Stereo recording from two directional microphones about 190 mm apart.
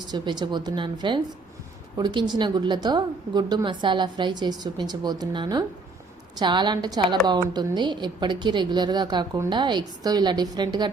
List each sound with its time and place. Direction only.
0.1 s a woman's voice: 20° right (ahead or behind)